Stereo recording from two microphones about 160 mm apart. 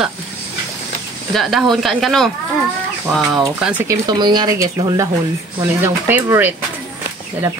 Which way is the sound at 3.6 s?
10° right (ahead or behind).